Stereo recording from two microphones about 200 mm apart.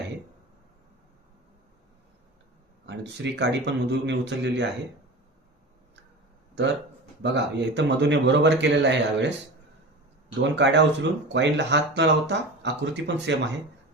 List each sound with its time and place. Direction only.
2.8 s speech: 60° right (ahead or behind)
6.6 s speech: 60° right (ahead or behind)
10.4 s speech: 60° right (ahead or behind)